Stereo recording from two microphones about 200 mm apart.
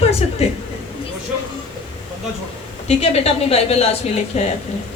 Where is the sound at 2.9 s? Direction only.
30° left (ahead or behind).